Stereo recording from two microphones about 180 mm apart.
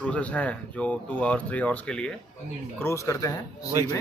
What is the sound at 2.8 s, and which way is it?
Speech, 15° left (ahead or behind).